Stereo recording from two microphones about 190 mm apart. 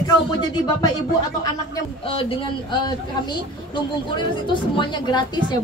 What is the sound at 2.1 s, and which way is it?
Speech, 25° left (ahead or behind).